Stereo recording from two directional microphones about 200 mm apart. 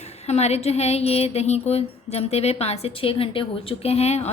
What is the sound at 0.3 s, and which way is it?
A woman's voice, 35° left (ahead or behind).